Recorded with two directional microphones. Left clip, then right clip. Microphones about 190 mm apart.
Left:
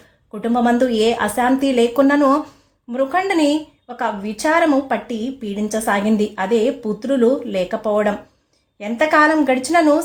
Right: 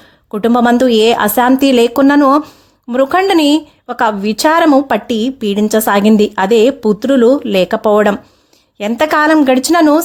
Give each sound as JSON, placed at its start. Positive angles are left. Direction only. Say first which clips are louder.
{"t": 0.3, "sound": "a woman's voice", "louder": "right 7 dB", "side_deg": -50}